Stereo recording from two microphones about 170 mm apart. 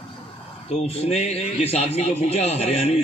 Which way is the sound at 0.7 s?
40° left (ahead or behind).